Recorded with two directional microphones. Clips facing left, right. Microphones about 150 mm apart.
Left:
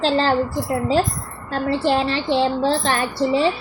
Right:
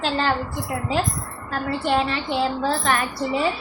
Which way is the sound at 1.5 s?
30° left (ahead or behind).